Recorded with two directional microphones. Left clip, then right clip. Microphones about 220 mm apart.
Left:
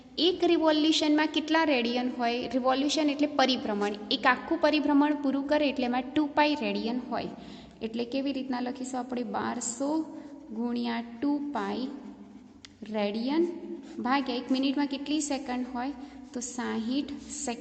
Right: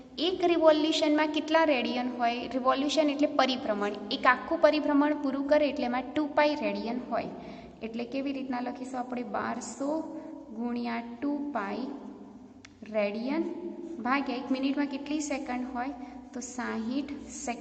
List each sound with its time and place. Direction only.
0.2 s a woman's voice: 35° left (ahead or behind)
12.9 s a woman's voice: 30° left (ahead or behind)